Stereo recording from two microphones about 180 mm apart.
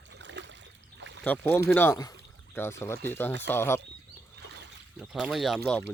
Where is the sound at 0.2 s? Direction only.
85° right.